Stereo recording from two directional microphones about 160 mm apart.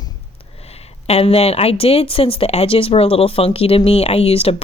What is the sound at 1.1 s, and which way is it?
Speech, 40° left (ahead or behind).